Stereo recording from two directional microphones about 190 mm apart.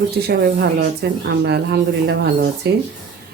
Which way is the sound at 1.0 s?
60° right (ahead or behind).